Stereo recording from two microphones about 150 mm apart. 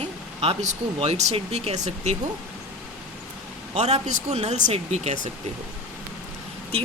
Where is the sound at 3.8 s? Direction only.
50° right (ahead or behind).